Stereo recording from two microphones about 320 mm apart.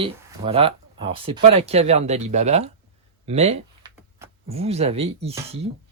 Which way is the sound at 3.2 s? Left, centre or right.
Centre.